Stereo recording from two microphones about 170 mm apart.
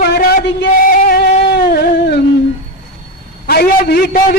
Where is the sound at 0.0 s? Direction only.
70° left (ahead or behind).